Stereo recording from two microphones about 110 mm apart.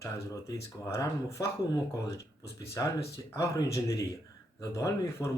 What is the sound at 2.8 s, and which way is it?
Speech, 30° left (ahead or behind).